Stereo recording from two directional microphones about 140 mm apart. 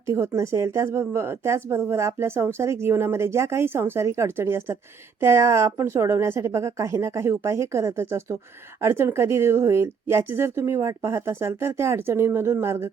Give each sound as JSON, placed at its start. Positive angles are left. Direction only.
{"t": 0.0, "sound": "speech", "side_deg": -20}